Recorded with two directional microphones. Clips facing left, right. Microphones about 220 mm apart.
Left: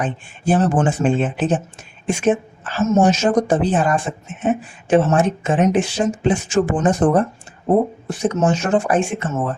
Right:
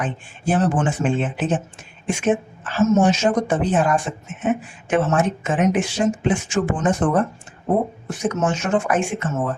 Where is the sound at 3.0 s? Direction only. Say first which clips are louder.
Left 2 dB; 40° left (ahead or behind).